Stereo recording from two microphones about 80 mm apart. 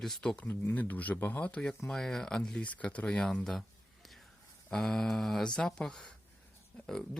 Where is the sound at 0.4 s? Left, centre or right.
Left.